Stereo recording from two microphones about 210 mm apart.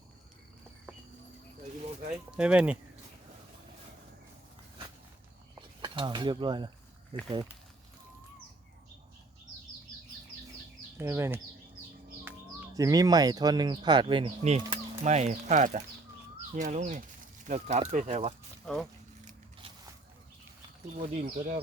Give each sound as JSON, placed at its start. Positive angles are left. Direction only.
{"t": 2.3, "sound": "speech", "side_deg": -5}
{"t": 5.5, "sound": "cutlery", "side_deg": -20}
{"t": 10.9, "sound": "speech", "side_deg": -10}
{"t": 18.6, "sound": "speech", "side_deg": 5}
{"t": 19.2, "sound": "a sound", "side_deg": -35}
{"t": 20.9, "sound": "speech", "side_deg": -35}